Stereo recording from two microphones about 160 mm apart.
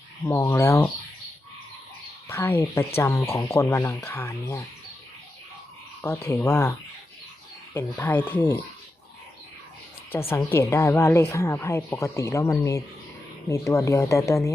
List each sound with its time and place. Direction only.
0.3 s a woman's voice: 20° left (ahead or behind)
2.2 s a woman's voice: 15° left (ahead or behind)
6.2 s a woman's voice: 15° left (ahead or behind)
10.1 s a woman's voice: 15° left (ahead or behind)